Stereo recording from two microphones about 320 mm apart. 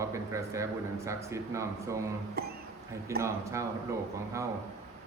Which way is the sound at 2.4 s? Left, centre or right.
Right.